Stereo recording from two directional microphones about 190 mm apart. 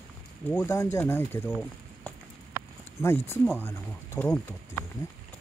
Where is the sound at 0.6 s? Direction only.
15° left (ahead or behind).